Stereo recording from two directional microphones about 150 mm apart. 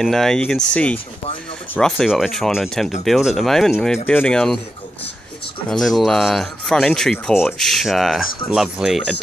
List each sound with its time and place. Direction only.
0.0 s speech: 5° left (ahead or behind)
5.7 s speech: centre (ahead or behind)